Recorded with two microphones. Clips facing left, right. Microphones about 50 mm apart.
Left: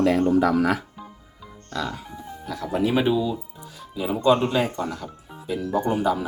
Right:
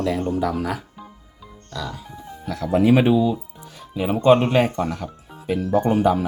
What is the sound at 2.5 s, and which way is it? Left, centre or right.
Speech, right.